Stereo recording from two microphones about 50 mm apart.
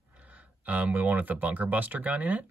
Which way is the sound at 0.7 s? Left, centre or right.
Right.